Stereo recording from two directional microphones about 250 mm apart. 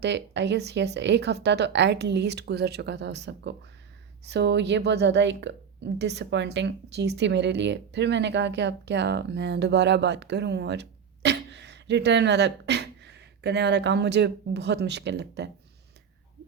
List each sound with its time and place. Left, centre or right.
0.0 s a woman's voice: right